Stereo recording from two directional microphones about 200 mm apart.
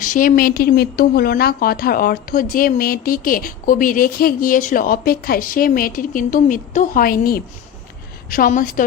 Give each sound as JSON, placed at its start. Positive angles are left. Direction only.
{"t": 0.0, "sound": "a woman's voice", "side_deg": 40}